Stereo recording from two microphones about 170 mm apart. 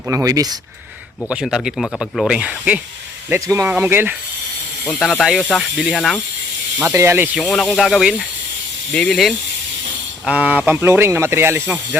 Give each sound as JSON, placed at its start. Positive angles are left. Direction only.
{"t": 0.1, "sound": "speech", "side_deg": -20}
{"t": 1.3, "sound": "speech", "side_deg": -5}
{"t": 4.9, "sound": "speech", "side_deg": 0}
{"t": 6.9, "sound": "speech", "side_deg": -15}
{"t": 7.3, "sound": "speech", "side_deg": 0}
{"t": 10.2, "sound": "speech", "side_deg": -10}